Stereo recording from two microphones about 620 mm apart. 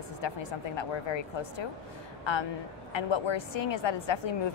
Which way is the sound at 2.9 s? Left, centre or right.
Left.